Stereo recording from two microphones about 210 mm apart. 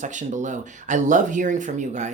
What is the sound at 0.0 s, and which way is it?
Speech, 35° right (ahead or behind).